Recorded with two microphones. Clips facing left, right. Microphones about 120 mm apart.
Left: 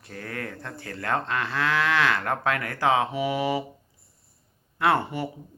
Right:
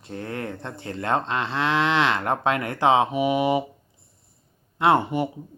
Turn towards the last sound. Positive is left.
turn(degrees=-20)  # may be behind; listen again after turning